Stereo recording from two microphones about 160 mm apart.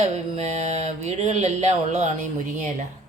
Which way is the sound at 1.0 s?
45° right (ahead or behind).